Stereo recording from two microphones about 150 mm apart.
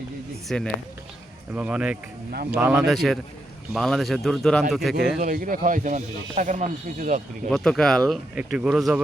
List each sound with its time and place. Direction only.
0.4 s speech: 5° left (ahead or behind)
1.5 s speech: 5° right (ahead or behind)
2.3 s speech: 90° right
2.6 s speech: 10° right (ahead or behind)
5.2 s speech: 65° right (ahead or behind)
7.5 s speech: 5° left (ahead or behind)